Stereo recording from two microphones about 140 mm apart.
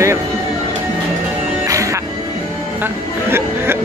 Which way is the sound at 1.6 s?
20° right (ahead or behind).